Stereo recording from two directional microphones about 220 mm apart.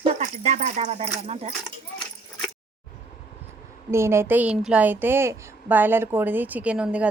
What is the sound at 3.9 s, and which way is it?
A woman's voice, 10° right (ahead or behind).